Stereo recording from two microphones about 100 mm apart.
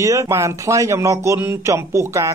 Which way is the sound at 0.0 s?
30° right (ahead or behind).